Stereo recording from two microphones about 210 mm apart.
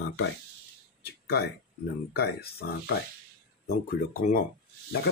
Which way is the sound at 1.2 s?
50° left (ahead or behind).